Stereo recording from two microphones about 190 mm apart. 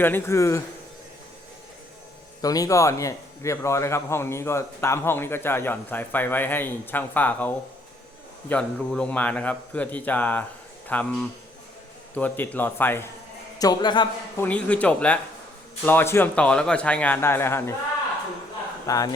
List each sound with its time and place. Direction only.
0.0 s speech: 10° left (ahead or behind)
2.4 s speech: 20° left (ahead or behind)
13.6 s a man's voice: 20° left (ahead or behind)
14.3 s speech: 10° left (ahead or behind)
18.9 s a man's voice: 20° left (ahead or behind)